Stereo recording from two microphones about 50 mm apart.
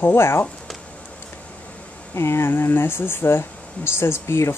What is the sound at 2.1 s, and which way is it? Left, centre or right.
A woman's voice, left.